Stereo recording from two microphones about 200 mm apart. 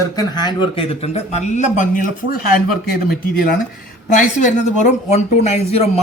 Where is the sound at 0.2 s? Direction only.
20° left (ahead or behind).